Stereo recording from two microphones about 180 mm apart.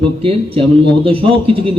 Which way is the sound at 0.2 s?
30° right (ahead or behind).